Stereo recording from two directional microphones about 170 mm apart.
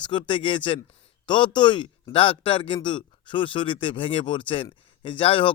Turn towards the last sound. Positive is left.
turn(degrees=30)  # may be behind; listen again after turning